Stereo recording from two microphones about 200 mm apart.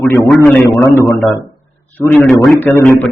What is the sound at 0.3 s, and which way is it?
A man's voice, 10° left (ahead or behind).